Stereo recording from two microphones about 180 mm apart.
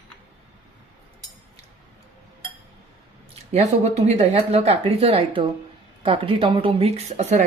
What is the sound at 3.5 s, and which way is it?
Speech, 40° right (ahead or behind).